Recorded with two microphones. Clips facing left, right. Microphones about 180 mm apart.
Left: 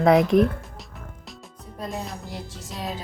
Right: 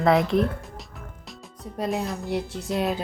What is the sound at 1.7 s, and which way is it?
Speech, 75° right (ahead or behind).